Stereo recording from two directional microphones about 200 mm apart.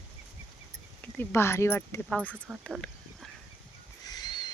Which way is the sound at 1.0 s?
10° left (ahead or behind).